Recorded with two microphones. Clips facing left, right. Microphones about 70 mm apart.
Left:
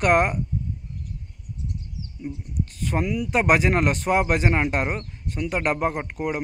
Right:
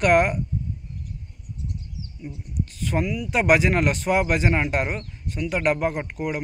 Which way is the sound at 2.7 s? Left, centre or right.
Left.